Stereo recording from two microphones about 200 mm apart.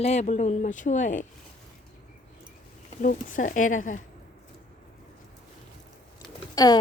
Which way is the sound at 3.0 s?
40° left (ahead or behind).